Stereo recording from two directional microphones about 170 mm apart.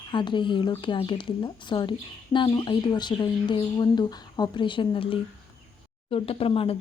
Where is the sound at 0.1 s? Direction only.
30° left (ahead or behind).